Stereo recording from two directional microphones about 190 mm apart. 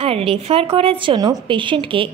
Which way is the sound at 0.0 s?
30° right (ahead or behind).